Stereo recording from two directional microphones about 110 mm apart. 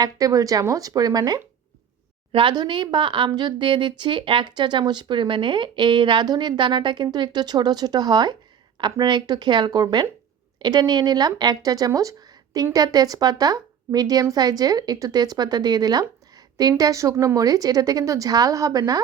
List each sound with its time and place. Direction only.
0.0 s a woman's voice: 35° right (ahead or behind)
2.3 s a woman's voice: 50° right (ahead or behind)
11.9 s a sound: 30° right (ahead or behind)
12.7 s a woman's voice: 35° right (ahead or behind)